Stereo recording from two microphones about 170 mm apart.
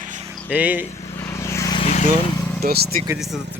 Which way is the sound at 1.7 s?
40° left (ahead or behind).